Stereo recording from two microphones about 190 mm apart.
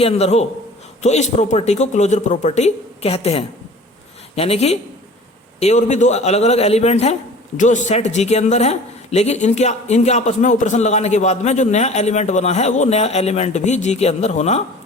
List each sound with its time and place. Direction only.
0.0 s a man's voice: 30° left (ahead or behind)